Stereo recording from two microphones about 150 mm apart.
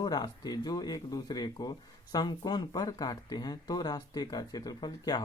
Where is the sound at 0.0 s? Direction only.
25° left (ahead or behind).